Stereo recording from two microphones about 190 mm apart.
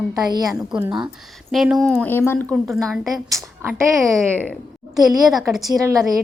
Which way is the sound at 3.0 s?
15° right (ahead or behind).